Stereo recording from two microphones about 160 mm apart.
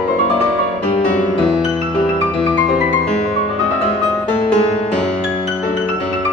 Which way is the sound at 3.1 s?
40° left (ahead or behind).